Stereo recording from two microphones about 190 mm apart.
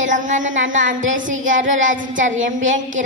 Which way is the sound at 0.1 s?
40° right (ahead or behind).